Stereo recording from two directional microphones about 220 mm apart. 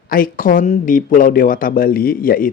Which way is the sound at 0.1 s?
40° left (ahead or behind).